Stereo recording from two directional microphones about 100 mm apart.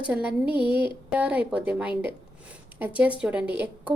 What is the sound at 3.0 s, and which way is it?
Speech, 15° right (ahead or behind).